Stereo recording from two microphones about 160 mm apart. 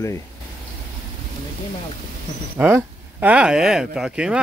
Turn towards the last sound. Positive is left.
turn(degrees=-5)  # may be behind; listen again after turning